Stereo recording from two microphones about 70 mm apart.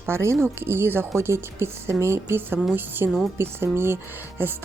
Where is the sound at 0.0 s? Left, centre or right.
Right.